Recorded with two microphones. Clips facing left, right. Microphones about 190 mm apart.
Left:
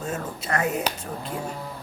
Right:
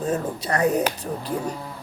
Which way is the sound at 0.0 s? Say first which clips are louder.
Right 6 dB; 35° right (ahead or behind).